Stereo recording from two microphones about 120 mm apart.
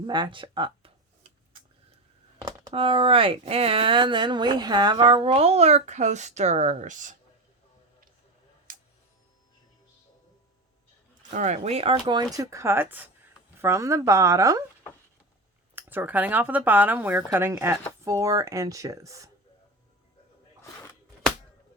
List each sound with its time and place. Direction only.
0.1 s speech: 40° right (ahead or behind)
2.7 s speech: 50° right (ahead or behind); by 7.2 s 90° right
11.3 s speech: 80° right; by 14.6 s 25° right (ahead or behind)
15.7 s speech: 15° right (ahead or behind)